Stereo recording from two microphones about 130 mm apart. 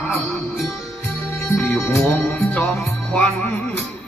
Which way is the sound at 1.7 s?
5° left (ahead or behind).